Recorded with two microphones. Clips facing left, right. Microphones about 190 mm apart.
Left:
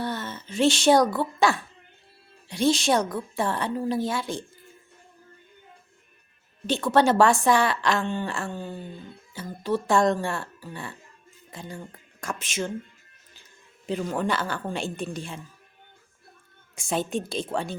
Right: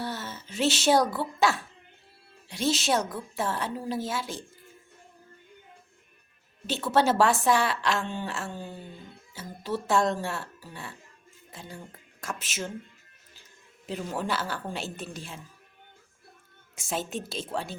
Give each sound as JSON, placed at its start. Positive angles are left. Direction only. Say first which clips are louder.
{"t": 0.0, "sound": "a woman's voice", "louder": "left 4 dB", "side_deg": -5}
{"t": 6.7, "sound": "a woman's voice", "louder": "left 4 dB", "side_deg": -5}
{"t": 13.8, "sound": "a woman's voice", "louder": "left 5 dB", "side_deg": -5}
{"t": 16.7, "sound": "a woman's voice", "louder": "left 5 dB", "side_deg": -5}